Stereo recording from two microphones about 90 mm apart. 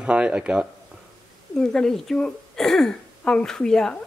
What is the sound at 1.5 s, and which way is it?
Speech, 5° left (ahead or behind).